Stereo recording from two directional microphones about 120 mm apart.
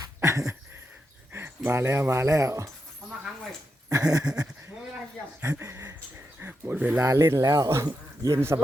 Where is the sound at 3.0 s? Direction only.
Centre (ahead or behind).